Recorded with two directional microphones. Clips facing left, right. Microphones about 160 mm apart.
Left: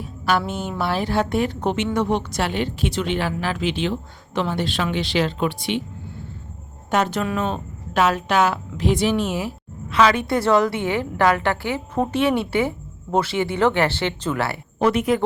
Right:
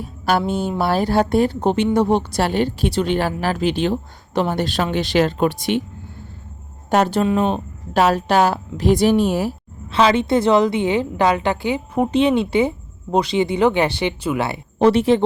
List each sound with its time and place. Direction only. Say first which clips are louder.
0.0 s a woman's voice: right 3 dB; 40° right (ahead or behind)
6.9 s a woman's voice: right 5 dB; 35° right (ahead or behind)
7.9 s a woman's voice: right 3 dB; 35° right (ahead or behind); by 14.6 s 15° right (ahead or behind)
14.8 s a woman's voice: right 5 dB; 30° right (ahead or behind)